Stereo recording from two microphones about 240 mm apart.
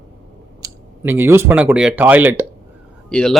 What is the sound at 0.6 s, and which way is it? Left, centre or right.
Speech, centre.